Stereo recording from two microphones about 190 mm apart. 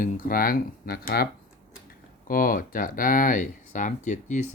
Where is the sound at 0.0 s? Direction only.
50° left (ahead or behind).